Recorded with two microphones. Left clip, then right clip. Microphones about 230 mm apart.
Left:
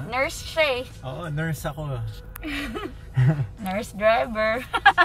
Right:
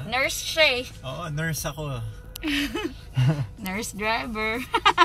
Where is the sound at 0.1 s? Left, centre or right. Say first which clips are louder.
Right 1 dB; centre.